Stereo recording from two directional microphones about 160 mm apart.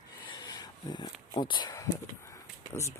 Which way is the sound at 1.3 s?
30° left (ahead or behind).